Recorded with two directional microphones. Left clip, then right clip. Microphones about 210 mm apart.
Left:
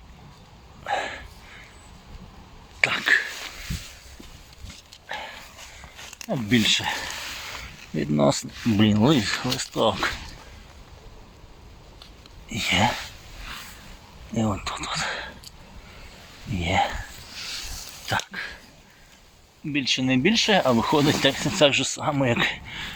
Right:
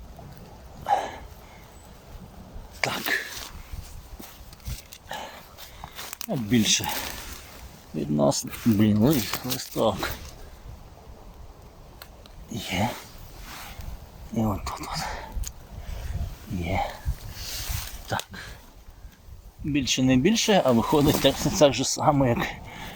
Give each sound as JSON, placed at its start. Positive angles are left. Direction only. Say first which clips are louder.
{"t": 0.9, "sound": "snort", "louder": "right 2 dB", "side_deg": -5}
{"t": 2.8, "sound": "a sound", "louder": "left 6 dB", "side_deg": -5}
{"t": 5.0, "sound": "a sound", "louder": "left 2 dB", "side_deg": -20}
{"t": 6.1, "sound": "speech", "louder": "left 2 dB", "side_deg": 0}
{"t": 7.9, "sound": "speech", "louder": "left 2 dB", "side_deg": 10}
{"t": 12.5, "sound": "speech", "louder": "left 7 dB", "side_deg": 0}
{"t": 14.3, "sound": "speech", "louder": "left 2 dB", "side_deg": 0}
{"t": 16.6, "sound": "speech", "louder": "left 6 dB", "side_deg": 0}
{"t": 18.3, "sound": "a sound", "louder": "left 8 dB", "side_deg": -10}
{"t": 19.7, "sound": "speech", "louder": "even", "side_deg": -25}